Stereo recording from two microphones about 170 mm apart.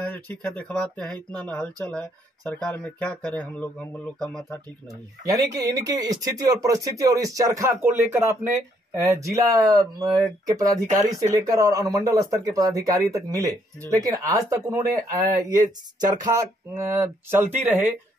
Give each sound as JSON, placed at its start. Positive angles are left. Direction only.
{"t": 0.0, "sound": "speech", "side_deg": 10}
{"t": 5.2, "sound": "speech", "side_deg": -20}
{"t": 15.0, "sound": "speech", "side_deg": -45}
{"t": 16.0, "sound": "speech", "side_deg": -20}